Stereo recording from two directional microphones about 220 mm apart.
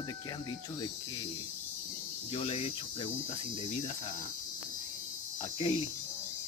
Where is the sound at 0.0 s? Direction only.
20° left (ahead or behind).